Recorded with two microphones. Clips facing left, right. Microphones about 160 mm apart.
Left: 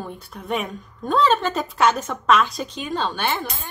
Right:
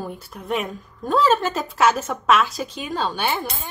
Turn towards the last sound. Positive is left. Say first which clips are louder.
# right 1 dB
turn(degrees=-10)  # may be behind; listen again after turning